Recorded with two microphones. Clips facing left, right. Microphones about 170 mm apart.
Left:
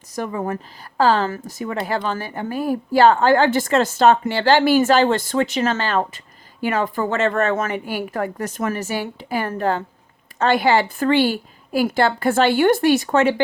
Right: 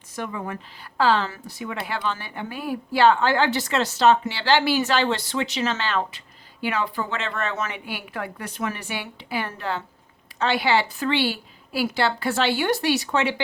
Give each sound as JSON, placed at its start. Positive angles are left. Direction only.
{"t": 0.2, "sound": "speech", "side_deg": 40}